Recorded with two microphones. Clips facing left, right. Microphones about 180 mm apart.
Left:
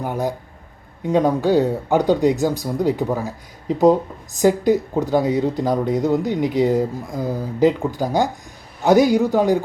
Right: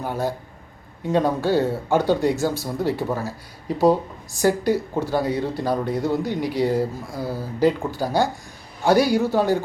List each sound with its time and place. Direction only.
0.0 s speech: 15° left (ahead or behind)